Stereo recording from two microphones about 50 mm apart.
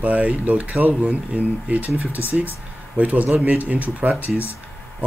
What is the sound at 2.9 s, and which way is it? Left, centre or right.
Speech, right.